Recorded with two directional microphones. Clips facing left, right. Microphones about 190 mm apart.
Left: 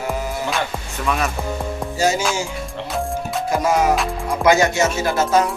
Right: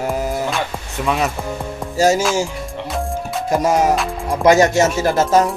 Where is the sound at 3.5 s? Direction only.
40° right (ahead or behind).